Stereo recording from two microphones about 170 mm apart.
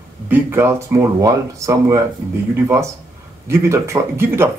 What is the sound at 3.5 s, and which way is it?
Speech, 15° right (ahead or behind).